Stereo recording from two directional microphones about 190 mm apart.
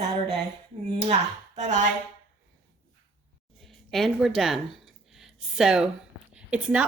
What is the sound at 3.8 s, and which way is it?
A woman's voice, centre (ahead or behind).